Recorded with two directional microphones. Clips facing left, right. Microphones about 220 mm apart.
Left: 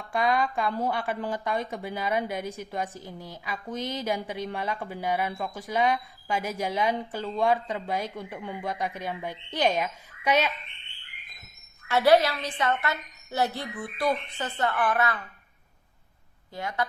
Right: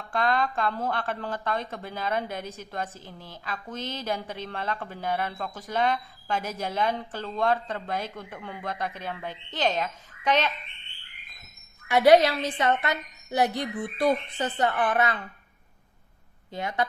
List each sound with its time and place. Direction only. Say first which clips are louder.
0.1 s speech: left 1 dB; 10° left (ahead or behind)
11.9 s a woman's voice: right 3 dB; 15° right (ahead or behind)
16.5 s a woman's voice: right 2 dB; 20° right (ahead or behind)